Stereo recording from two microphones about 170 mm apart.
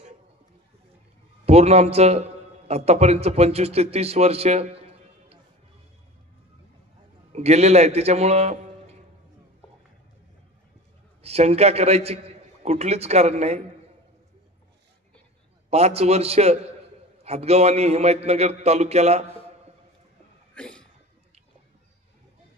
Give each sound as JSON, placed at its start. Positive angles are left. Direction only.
{"t": 1.4, "sound": "a man's voice", "side_deg": -40}
{"t": 7.3, "sound": "a man's voice", "side_deg": -40}
{"t": 11.2, "sound": "a man's voice", "side_deg": -40}
{"t": 15.7, "sound": "a man's voice", "side_deg": -40}
{"t": 20.5, "sound": "a sound", "side_deg": 5}